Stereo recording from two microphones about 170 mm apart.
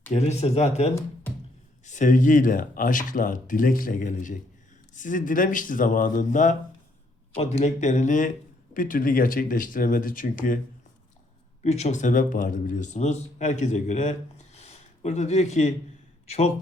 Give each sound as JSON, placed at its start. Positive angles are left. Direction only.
{"t": 0.1, "sound": "speech", "side_deg": 40}
{"t": 11.6, "sound": "speech", "side_deg": 40}